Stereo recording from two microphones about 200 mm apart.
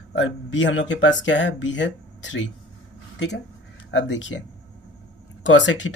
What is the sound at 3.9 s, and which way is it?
Speech, 65° left (ahead or behind).